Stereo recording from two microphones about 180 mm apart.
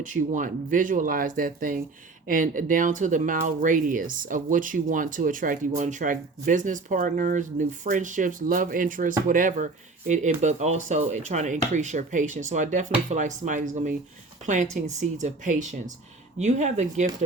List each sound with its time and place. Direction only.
0.0 s speech: 45° right (ahead or behind)